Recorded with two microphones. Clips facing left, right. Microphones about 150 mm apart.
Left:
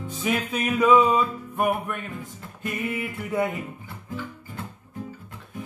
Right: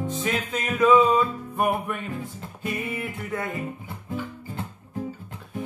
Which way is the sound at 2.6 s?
Centre (ahead or behind).